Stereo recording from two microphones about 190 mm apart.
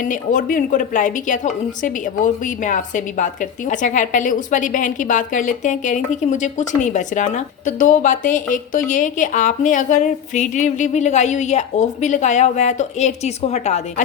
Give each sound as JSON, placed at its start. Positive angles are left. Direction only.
{"t": 0.0, "sound": "a woman's voice", "side_deg": 45}